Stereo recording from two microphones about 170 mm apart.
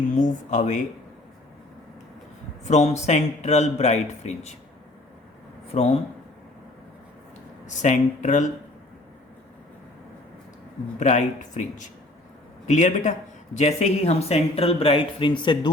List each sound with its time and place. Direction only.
0.1 s speech: 45° left (ahead or behind)
2.6 s speech: 40° left (ahead or behind)
5.7 s speech: 35° left (ahead or behind)
7.8 s speech: 45° left (ahead or behind)
11.0 s speech: 45° left (ahead or behind); by 15.7 s 30° left (ahead or behind)